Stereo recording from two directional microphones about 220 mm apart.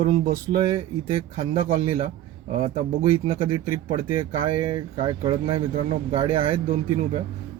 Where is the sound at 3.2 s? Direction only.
25° right (ahead or behind).